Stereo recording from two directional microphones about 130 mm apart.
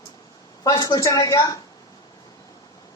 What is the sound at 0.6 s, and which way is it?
Speech, 30° left (ahead or behind).